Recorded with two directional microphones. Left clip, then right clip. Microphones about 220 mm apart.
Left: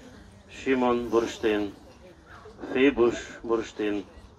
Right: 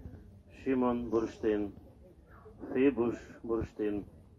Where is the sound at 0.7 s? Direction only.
30° right (ahead or behind).